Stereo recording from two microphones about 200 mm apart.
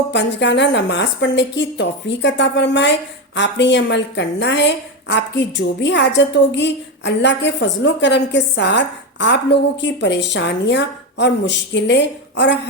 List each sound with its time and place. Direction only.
0.1 s a woman's voice: 60° left (ahead or behind)